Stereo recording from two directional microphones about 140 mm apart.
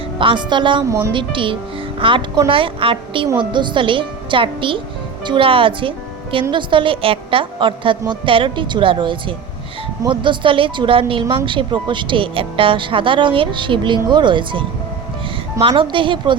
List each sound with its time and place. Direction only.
0.2 s speech: 35° right (ahead or behind)
0.9 s a woman's voice: 20° right (ahead or behind)
1.1 s speech: 35° right (ahead or behind)
15.6 s speech: 35° right (ahead or behind)